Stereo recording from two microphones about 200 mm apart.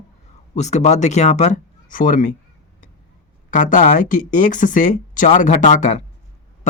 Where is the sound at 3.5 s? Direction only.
40° left (ahead or behind).